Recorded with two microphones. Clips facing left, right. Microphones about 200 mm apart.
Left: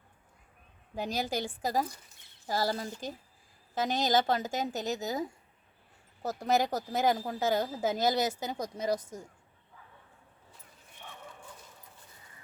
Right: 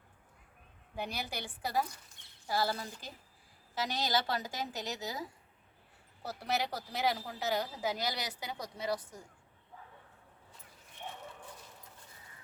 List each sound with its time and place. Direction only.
1.1 s speech: 45° left (ahead or behind)
6.2 s speech: 45° left (ahead or behind)